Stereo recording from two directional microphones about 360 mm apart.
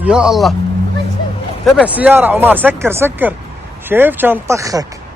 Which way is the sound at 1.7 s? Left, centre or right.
Centre.